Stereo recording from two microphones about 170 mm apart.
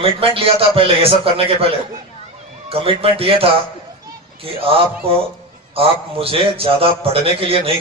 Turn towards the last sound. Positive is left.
turn(degrees=-35)  # may be behind; listen again after turning